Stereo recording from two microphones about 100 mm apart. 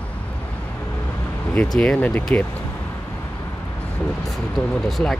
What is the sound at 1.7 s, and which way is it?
Speech, 10° left (ahead or behind).